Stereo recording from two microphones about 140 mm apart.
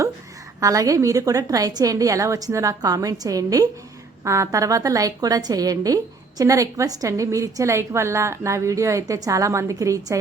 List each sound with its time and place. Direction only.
0.6 s a woman's voice: 25° right (ahead or behind)